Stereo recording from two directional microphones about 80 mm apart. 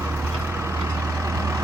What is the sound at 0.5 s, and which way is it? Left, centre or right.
Vehicle, right.